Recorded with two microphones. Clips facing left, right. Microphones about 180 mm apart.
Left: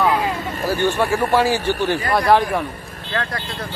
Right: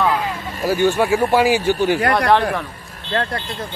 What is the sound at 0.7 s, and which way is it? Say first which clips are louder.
A man's voice: right 3 dB; 10° right (ahead or behind).